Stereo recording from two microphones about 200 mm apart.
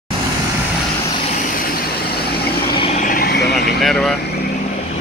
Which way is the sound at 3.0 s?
45° left (ahead or behind).